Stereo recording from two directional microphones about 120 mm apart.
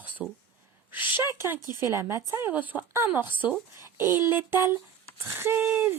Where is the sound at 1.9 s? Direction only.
25° right (ahead or behind).